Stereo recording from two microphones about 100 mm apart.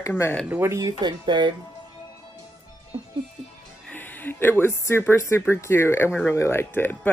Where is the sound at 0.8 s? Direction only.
50° right (ahead or behind).